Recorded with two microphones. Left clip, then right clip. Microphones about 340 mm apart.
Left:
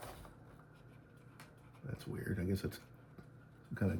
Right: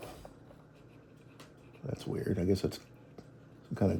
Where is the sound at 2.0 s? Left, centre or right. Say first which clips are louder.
Right 8 dB; centre.